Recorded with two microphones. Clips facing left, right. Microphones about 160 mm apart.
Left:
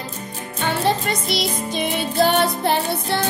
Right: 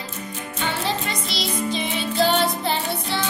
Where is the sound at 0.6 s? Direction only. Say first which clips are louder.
Left 5 dB; 55° left (ahead or behind).